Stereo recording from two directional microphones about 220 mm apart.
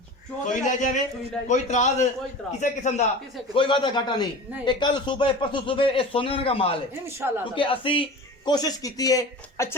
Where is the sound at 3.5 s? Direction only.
20° left (ahead or behind).